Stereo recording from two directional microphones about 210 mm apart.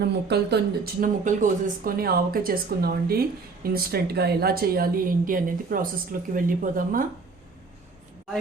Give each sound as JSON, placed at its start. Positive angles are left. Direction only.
{"t": 0.0, "sound": "speech", "side_deg": -50}
{"t": 1.0, "sound": "speech", "side_deg": -35}